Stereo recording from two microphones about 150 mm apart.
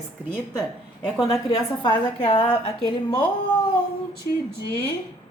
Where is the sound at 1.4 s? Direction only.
30° left (ahead or behind).